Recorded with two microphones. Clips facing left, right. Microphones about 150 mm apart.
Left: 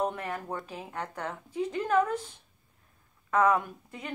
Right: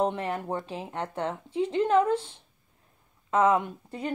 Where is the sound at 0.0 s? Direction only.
25° right (ahead or behind).